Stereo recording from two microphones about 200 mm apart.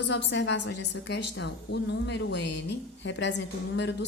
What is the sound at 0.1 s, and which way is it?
A woman's voice, 60° left (ahead or behind).